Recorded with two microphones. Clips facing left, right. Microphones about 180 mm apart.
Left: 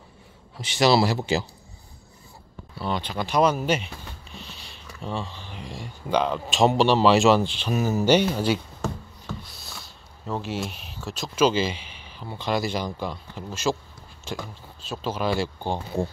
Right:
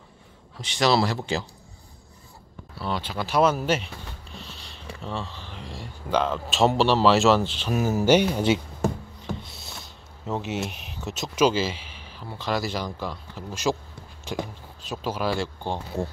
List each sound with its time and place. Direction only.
0.6 s speech: 5° left (ahead or behind)
2.8 s speech: 5° right (ahead or behind)
4.4 s a sound: centre (ahead or behind)
5.0 s speech: centre (ahead or behind)
8.4 s a sound: 20° right (ahead or behind)
11.0 s speech: 20° right (ahead or behind)
11.5 s speech: 5° right (ahead or behind)
13.5 s speech: 15° right (ahead or behind)
15.3 s speech: centre (ahead or behind)